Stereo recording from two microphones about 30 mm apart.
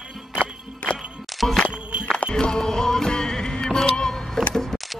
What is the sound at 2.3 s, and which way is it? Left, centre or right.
Music, left.